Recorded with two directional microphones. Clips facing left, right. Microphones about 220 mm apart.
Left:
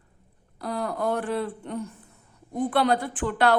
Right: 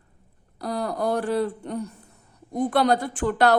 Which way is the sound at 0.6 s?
35° right (ahead or behind).